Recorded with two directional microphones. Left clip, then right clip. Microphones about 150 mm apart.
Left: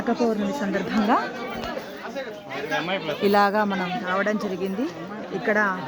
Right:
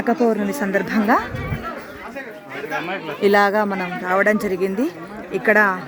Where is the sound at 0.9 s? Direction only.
35° right (ahead or behind).